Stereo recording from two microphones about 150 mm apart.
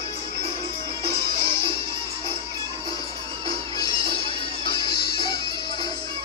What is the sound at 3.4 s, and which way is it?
Music, 25° left (ahead or behind).